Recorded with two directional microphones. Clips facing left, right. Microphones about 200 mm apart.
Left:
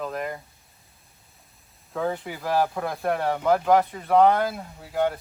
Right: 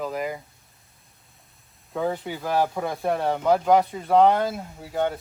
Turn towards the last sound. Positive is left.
turn(degrees=0)  # may be behind; listen again after turning